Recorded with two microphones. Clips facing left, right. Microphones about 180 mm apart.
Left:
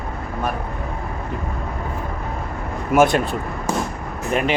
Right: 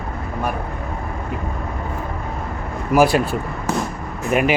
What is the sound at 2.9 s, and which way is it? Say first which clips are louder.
Speech: right 1 dB; centre (ahead or behind).